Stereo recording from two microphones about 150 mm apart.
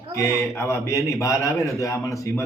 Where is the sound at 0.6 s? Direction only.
20° left (ahead or behind).